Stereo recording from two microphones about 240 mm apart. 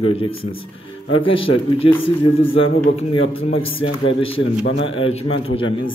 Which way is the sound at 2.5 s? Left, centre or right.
Left.